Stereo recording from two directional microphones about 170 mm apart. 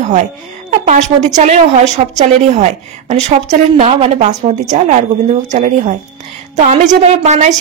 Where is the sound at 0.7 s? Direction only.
45° right (ahead or behind).